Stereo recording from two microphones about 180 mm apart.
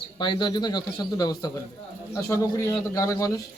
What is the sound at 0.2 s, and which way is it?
Speech, 25° left (ahead or behind).